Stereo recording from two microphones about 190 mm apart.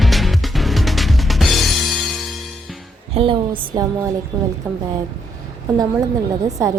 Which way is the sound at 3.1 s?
25° right (ahead or behind).